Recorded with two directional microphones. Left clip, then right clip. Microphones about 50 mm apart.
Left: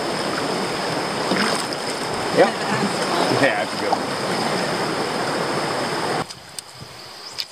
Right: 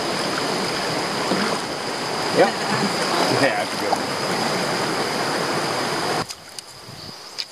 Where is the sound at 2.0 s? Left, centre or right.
Right.